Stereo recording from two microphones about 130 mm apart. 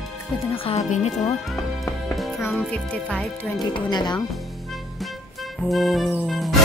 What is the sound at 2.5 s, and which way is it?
Speech, 5° left (ahead or behind).